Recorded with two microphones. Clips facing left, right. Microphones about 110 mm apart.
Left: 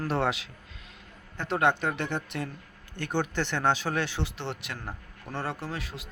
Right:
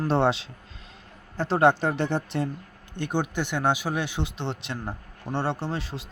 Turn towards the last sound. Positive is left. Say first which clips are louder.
# right 5 dB
turn(degrees=-30)  # may be behind; listen again after turning